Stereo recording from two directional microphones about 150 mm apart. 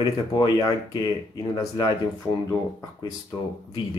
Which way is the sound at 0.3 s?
25° left (ahead or behind).